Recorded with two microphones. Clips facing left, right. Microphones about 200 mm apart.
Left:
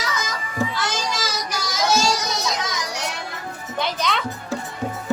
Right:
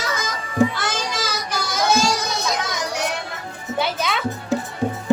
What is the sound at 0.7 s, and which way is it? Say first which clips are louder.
Children playing: even; 55° right (ahead or behind).